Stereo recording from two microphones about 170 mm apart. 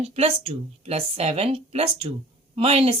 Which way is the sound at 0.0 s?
35° right (ahead or behind).